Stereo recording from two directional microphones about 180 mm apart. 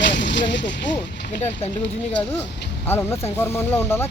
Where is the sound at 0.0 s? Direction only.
80° left.